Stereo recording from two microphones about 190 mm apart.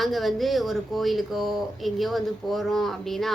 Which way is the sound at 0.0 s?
Centre (ahead or behind).